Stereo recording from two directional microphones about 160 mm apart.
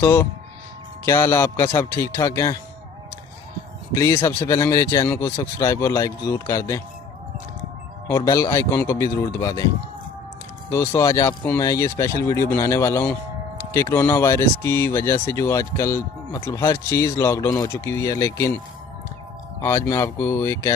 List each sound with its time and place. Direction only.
0.0 s speech: 15° left (ahead or behind)
3.9 s speech: 15° left (ahead or behind)
8.0 s speech: 20° left (ahead or behind)
10.7 s speech: 20° left (ahead or behind)
19.6 s speech: 20° left (ahead or behind)